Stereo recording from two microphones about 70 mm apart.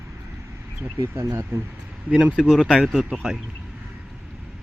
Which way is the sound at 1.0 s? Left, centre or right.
Right.